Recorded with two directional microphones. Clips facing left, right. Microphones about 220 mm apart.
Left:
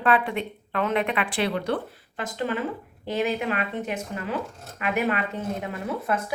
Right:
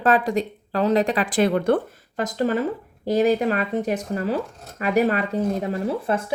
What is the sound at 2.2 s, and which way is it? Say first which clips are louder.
Speech: right 6 dB; 40° right (ahead or behind).